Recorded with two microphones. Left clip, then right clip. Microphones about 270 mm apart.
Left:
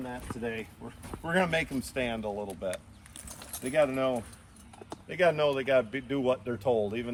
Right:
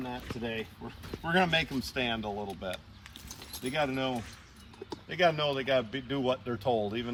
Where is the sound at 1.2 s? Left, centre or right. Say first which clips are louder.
Right 1 dB; centre.